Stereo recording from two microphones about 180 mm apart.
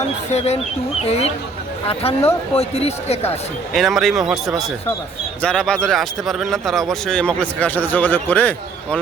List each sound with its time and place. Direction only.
0.3 s speech: 35° left (ahead or behind)
3.8 s a man's voice: centre (ahead or behind)